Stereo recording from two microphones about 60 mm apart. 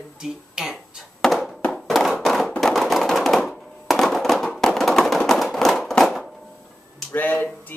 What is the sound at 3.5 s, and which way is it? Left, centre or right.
Fireworks, centre.